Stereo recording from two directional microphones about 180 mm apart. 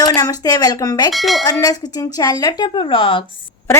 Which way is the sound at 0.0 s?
20° left (ahead or behind).